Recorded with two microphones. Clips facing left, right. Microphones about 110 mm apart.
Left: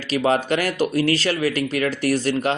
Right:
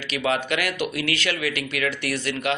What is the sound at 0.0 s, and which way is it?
Speech, 35° left (ahead or behind).